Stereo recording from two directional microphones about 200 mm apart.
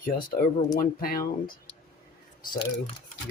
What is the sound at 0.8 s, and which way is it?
Speech, 45° left (ahead or behind).